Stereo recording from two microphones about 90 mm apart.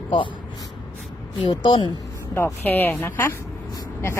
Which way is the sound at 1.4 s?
60° left (ahead or behind).